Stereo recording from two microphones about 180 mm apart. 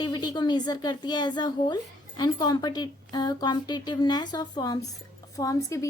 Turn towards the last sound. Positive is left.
turn(degrees=15)  # may be behind; listen again after turning